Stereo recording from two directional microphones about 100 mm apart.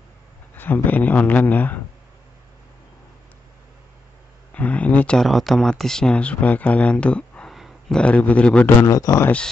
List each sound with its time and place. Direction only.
0.6 s speech: 20° left (ahead or behind)
4.6 s speech: 15° left (ahead or behind)
7.5 s a sound: centre (ahead or behind)
8.0 s speech: 15° left (ahead or behind)
8.8 s speech: 35° left (ahead or behind)